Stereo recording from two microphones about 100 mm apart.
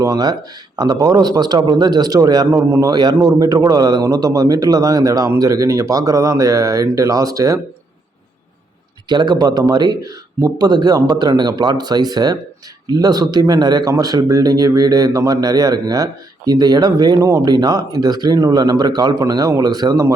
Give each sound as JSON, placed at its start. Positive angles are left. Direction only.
{"t": 0.0, "sound": "a man's voice", "side_deg": -40}
{"t": 2.8, "sound": "a man's voice", "side_deg": -45}
{"t": 9.0, "sound": "a man's voice", "side_deg": -45}